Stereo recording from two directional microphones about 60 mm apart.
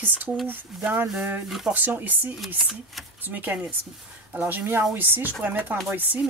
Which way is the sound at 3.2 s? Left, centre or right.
Right.